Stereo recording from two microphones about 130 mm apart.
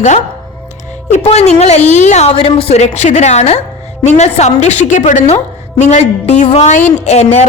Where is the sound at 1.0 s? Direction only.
60° left (ahead or behind).